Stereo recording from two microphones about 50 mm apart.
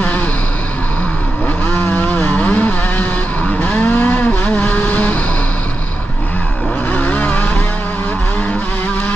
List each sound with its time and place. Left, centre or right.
1.8 s vehicle: left
3.5 s a sound: left
4.6 s vehicle: left
6.9 s vehicle: left